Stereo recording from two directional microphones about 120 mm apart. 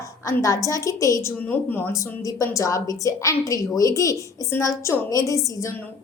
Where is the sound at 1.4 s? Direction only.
15° left (ahead or behind).